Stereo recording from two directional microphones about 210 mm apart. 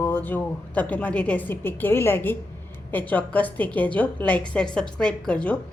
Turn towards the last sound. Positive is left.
turn(degrees=5)  # may be behind; listen again after turning